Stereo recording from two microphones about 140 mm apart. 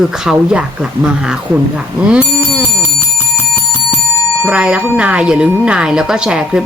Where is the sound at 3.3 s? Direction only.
15° left (ahead or behind).